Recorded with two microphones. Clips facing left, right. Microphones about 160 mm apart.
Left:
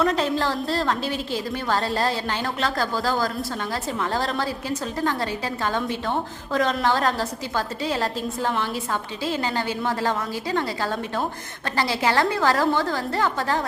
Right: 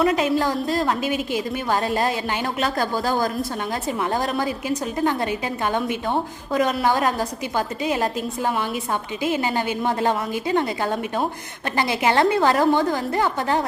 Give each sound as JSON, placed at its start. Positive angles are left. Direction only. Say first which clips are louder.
{"t": 0.0, "sound": "a woman's voice", "louder": "right 3 dB", "side_deg": -10}